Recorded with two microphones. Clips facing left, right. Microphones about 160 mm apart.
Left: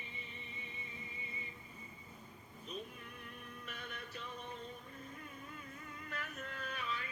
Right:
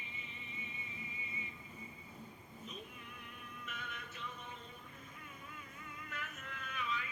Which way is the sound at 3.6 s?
35° left (ahead or behind).